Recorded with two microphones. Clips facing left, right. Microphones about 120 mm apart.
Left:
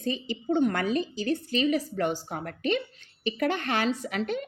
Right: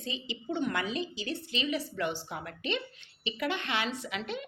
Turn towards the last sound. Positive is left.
turn(degrees=45)  # may be behind; listen again after turning